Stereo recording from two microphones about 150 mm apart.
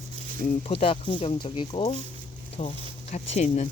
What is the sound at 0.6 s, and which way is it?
Speech, 40° left (ahead or behind).